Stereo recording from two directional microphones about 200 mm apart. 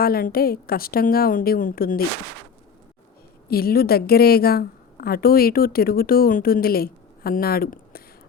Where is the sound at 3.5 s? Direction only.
50° left (ahead or behind).